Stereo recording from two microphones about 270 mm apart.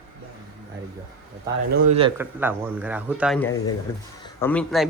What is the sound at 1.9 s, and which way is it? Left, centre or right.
Speech, centre.